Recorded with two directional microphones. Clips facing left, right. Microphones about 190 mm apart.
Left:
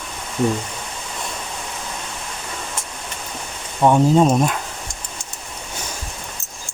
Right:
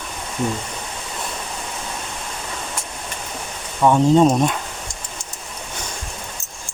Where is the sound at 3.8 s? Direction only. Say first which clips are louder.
Left 1 dB; 20° left (ahead or behind).